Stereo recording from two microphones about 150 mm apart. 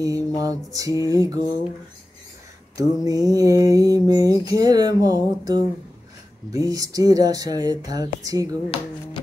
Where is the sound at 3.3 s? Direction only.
25° right (ahead or behind).